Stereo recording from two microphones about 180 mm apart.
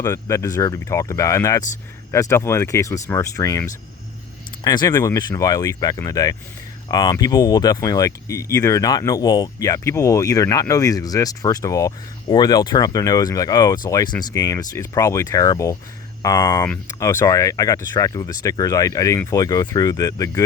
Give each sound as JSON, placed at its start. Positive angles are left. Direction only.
{"t": 0.0, "sound": "speech", "side_deg": 15}